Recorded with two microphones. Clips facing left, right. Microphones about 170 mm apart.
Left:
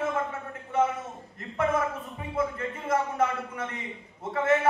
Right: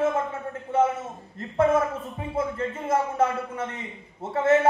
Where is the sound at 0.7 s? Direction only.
30° right (ahead or behind).